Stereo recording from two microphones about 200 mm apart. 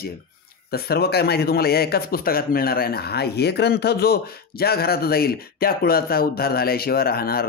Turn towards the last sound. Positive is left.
turn(degrees=50)  # may be behind; listen again after turning